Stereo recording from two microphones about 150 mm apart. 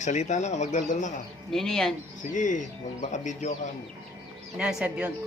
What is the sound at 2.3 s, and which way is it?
Speech, 60° left (ahead or behind).